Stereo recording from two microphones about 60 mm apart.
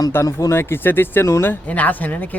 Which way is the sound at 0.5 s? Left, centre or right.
Left.